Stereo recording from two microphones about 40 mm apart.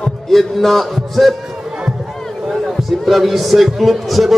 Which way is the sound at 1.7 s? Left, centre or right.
Centre.